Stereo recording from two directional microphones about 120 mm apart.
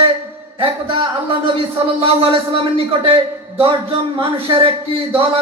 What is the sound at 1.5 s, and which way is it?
Speech, 50° right (ahead or behind).